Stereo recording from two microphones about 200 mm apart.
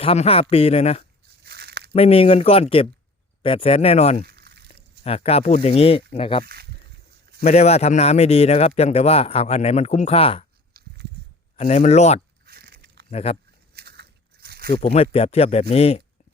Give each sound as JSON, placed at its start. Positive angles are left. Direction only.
{"t": 0.0, "sound": "a man's voice", "side_deg": 30}
{"t": 1.5, "sound": "crumpling", "side_deg": -55}
{"t": 1.9, "sound": "a man's voice", "side_deg": 30}
{"t": 4.3, "sound": "a sound", "side_deg": -55}
{"t": 4.7, "sound": "speech", "side_deg": 30}
{"t": 6.4, "sound": "speech", "side_deg": -50}
{"t": 7.4, "sound": "a man's voice", "side_deg": 35}
{"t": 10.8, "sound": "a sound", "side_deg": -50}
{"t": 11.5, "sound": "a man's voice", "side_deg": 35}
{"t": 12.5, "sound": "a sound", "side_deg": -50}
{"t": 13.1, "sound": "speech", "side_deg": 30}
{"t": 13.7, "sound": "biting", "side_deg": -55}
{"t": 14.7, "sound": "a man's voice", "side_deg": 30}